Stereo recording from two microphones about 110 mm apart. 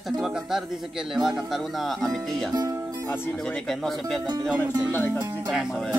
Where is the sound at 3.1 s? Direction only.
20° left (ahead or behind).